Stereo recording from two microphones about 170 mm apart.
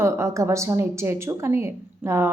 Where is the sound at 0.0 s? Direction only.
15° right (ahead or behind).